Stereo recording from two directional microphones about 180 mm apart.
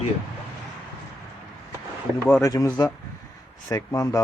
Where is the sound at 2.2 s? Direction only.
15° left (ahead or behind).